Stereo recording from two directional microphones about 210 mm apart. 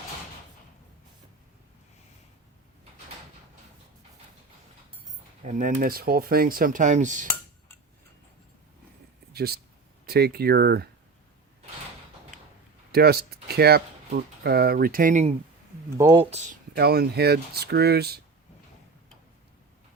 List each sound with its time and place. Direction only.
5.4 s speech: 35° right (ahead or behind)
9.3 s speech: 50° right (ahead or behind)
12.9 s speech: 50° right (ahead or behind)
16.0 s speech: 15° right (ahead or behind)
16.7 s speech: 50° right (ahead or behind)